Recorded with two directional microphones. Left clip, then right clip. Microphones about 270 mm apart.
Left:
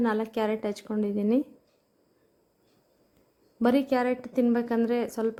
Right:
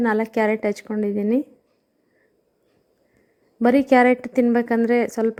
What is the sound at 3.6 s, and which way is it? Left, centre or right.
Speech, centre.